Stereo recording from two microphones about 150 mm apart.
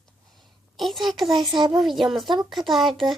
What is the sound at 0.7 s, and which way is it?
Speech, centre (ahead or behind).